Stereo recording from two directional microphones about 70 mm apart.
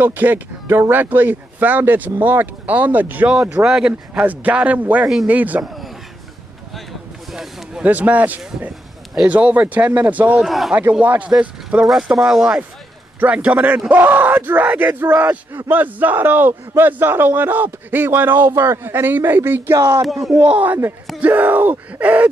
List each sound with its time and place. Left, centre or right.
0.0 s speech: right
3.6 s speech: centre
4.1 s speech: right
5.0 s speech: centre
5.4 s speech: right
7.2 s a sound: centre
7.8 s speech: right
10.4 s speech: centre
10.7 s speech: right
11.9 s speech: centre
13.2 s speech: centre